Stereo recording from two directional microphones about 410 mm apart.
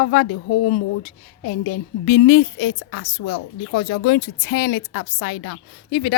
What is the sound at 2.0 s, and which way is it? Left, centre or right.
A woman's voice, left.